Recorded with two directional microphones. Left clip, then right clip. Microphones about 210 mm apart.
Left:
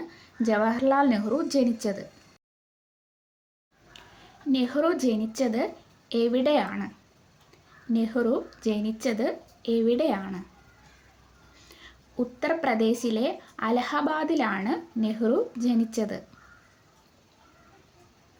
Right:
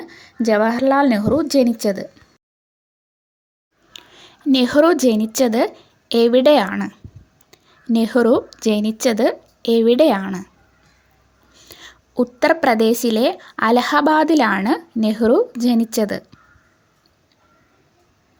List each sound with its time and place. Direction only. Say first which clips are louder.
0.1 s speech: right 9 dB; 40° right (ahead or behind)
3.9 s a woman's voice: right 9 dB; 50° right (ahead or behind)
7.9 s a woman's voice: right 11 dB; 50° right (ahead or behind)
11.5 s a woman's voice: right 10 dB; 45° right (ahead or behind)